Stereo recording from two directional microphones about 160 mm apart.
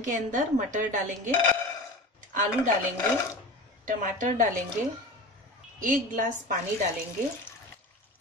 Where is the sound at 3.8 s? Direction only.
55° right (ahead or behind).